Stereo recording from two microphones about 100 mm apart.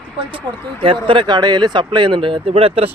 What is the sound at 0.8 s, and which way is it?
A man's voice, 65° right (ahead or behind).